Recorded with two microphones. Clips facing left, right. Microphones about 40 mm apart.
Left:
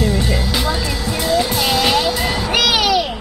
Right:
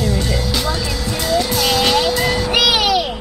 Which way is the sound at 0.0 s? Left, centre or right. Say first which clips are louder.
Left 1 dB; centre.